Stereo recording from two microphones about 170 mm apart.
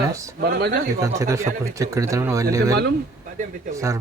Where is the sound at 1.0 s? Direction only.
20° right (ahead or behind).